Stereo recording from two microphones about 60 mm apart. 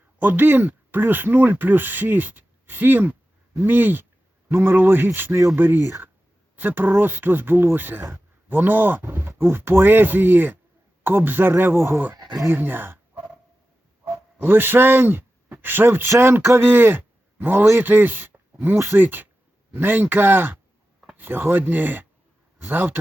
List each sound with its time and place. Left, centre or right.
0.2 s speech: right
14.3 s a man's voice: right